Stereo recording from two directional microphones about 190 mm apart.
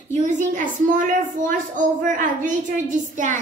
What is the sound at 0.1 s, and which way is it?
A woman's voice, 40° right (ahead or behind).